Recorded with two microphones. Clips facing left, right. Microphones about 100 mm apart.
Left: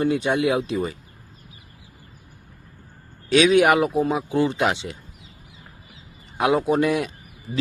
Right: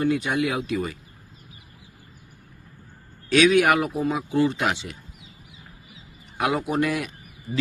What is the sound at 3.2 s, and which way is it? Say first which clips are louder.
Speech: left 2 dB; 25° left (ahead or behind).